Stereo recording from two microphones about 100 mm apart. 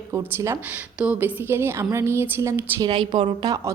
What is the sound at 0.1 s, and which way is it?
A woman's voice, 25° right (ahead or behind).